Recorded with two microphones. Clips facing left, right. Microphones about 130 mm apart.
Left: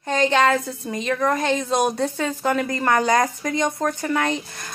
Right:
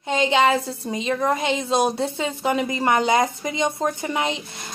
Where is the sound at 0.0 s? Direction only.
15° right (ahead or behind).